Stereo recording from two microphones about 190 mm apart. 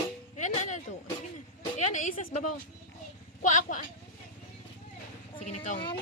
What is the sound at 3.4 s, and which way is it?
Speech, 40° left (ahead or behind).